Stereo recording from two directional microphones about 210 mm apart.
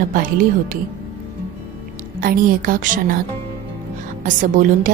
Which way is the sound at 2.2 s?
40° right (ahead or behind).